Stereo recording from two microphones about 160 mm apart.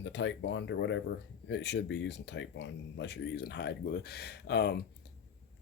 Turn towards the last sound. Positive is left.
turn(degrees=90)